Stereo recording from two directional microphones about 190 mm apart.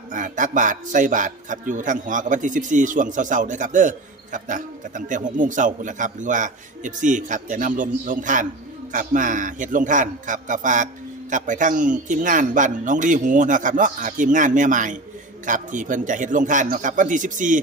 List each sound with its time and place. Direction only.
0.1 s a man's voice: 40° right (ahead or behind)